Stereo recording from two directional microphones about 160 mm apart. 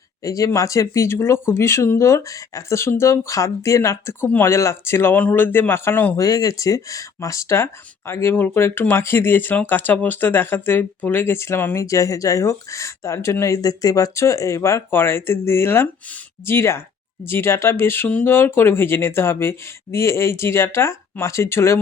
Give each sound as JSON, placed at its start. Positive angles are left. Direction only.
{"t": 0.3, "sound": "speech", "side_deg": 20}